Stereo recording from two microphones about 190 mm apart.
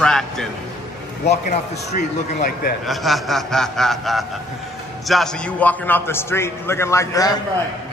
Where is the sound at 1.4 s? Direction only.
40° left (ahead or behind).